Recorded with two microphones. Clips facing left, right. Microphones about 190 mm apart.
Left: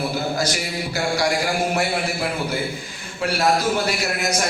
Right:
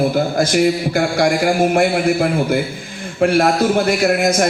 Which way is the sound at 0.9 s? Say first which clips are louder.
Right 6 dB; 55° right (ahead or behind).